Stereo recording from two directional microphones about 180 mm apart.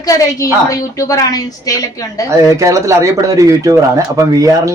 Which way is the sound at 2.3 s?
15° right (ahead or behind).